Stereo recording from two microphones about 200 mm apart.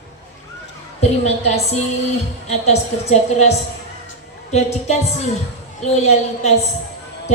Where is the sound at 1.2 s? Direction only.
35° left (ahead or behind).